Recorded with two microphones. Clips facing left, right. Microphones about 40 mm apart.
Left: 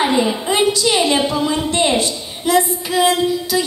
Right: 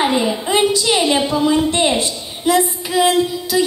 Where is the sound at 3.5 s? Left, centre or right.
Centre.